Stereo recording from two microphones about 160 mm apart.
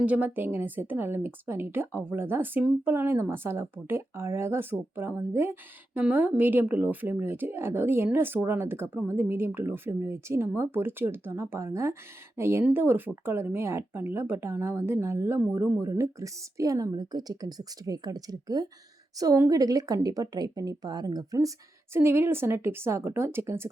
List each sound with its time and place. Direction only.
0.0 s a woman's voice: 10° right (ahead or behind)